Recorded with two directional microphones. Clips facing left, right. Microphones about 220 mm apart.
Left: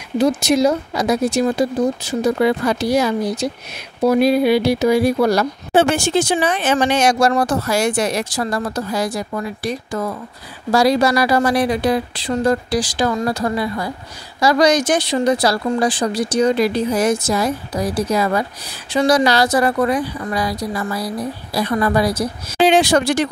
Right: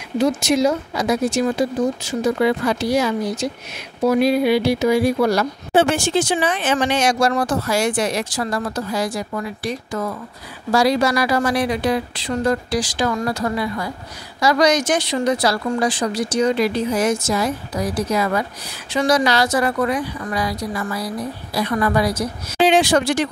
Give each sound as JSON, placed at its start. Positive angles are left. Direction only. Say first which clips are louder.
{"t": 0.2, "sound": "speech", "louder": "left 2 dB", "side_deg": 35}